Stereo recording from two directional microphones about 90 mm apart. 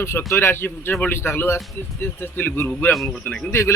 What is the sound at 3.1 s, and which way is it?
Speech, 15° left (ahead or behind).